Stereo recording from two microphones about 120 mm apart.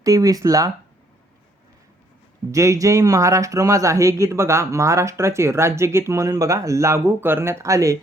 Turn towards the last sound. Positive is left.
turn(degrees=-25)  # may be behind; listen again after turning